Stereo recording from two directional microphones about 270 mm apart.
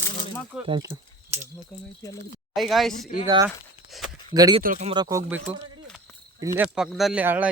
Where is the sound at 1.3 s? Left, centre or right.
Right.